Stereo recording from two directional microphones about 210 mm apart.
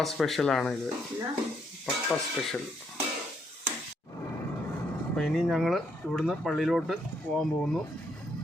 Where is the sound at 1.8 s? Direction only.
5° left (ahead or behind).